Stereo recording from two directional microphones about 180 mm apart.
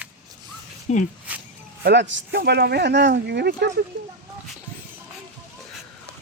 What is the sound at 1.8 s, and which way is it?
Speech, 75° right (ahead or behind).